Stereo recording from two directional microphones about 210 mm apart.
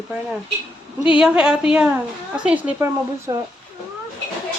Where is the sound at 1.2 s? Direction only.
5° right (ahead or behind).